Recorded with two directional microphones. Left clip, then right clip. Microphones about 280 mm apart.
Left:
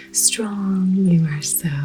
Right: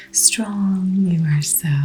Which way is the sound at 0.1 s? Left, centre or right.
Right.